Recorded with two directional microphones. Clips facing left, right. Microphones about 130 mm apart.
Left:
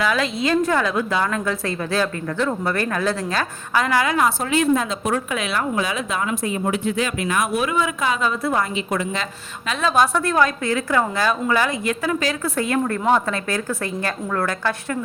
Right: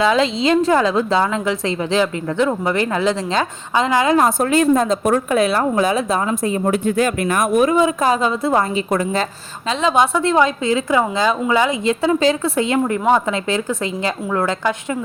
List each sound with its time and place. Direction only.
0.0 s a woman's voice: 25° right (ahead or behind)
4.4 s speech: 45° right (ahead or behind)
9.6 s a woman's voice: 20° right (ahead or behind)